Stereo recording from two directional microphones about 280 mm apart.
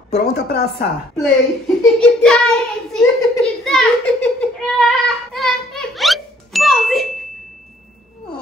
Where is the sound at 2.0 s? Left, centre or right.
Centre.